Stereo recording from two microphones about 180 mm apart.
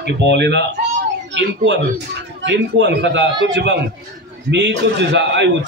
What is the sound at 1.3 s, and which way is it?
A man's voice, 80° right.